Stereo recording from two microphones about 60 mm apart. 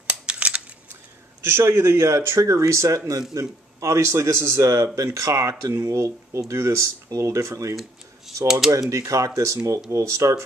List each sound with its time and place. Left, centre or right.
0.0 s scissors: right
1.4 s speech: right
8.5 s speech: centre
8.9 s speech: right